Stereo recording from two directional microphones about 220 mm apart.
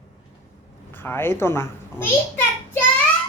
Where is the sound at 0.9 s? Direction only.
10° left (ahead or behind).